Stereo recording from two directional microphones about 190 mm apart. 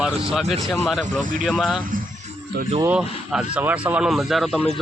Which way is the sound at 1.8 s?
45° right (ahead or behind).